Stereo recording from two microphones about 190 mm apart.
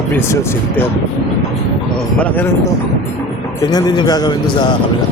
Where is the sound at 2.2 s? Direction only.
10° left (ahead or behind).